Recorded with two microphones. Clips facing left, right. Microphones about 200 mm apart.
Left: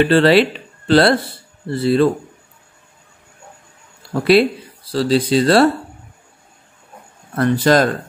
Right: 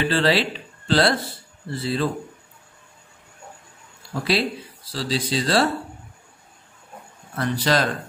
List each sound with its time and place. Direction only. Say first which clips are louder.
0.0 s speech: left 9 dB; 60° left (ahead or behind)
4.1 s speech: left 10 dB; 60° left (ahead or behind)
7.3 s speech: left 8 dB; 55° left (ahead or behind)